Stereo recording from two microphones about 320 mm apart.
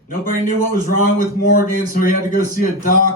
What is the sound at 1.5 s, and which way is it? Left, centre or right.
Speech, left.